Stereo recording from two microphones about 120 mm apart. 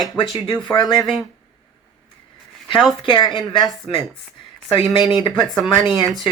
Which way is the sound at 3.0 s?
40° left (ahead or behind).